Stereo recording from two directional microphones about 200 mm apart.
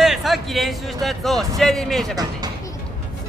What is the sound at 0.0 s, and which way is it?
Music, centre (ahead or behind).